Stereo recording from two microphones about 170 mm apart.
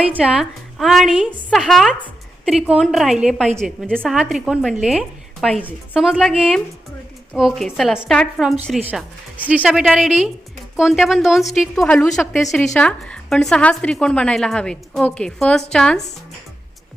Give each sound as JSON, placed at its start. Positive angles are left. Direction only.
{"t": 0.0, "sound": "a woman's voice", "side_deg": -10}